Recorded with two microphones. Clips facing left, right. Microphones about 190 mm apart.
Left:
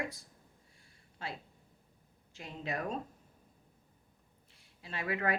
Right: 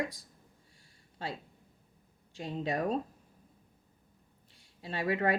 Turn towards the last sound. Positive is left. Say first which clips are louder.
# right 5 dB
turn(degrees=-30)  # may be behind; listen again after turning